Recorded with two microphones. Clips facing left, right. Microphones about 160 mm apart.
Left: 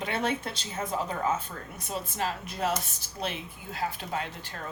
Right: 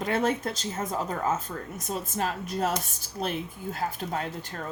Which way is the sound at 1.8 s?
45° right (ahead or behind).